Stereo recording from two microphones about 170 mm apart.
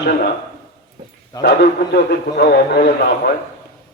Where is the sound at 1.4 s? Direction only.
70° left (ahead or behind).